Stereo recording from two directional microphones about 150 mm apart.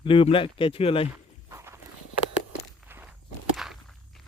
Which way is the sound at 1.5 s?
20° right (ahead or behind).